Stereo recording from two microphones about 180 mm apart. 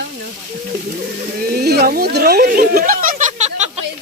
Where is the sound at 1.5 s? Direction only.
60° right (ahead or behind); by 3.7 s 40° right (ahead or behind).